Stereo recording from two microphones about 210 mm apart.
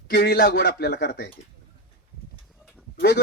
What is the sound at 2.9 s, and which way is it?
Speech, 55° left (ahead or behind).